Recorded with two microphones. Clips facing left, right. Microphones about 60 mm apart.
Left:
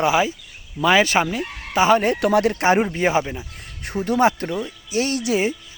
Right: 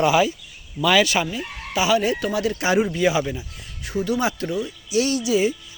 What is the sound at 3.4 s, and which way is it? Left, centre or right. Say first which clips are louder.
Speech: left 2 dB; left.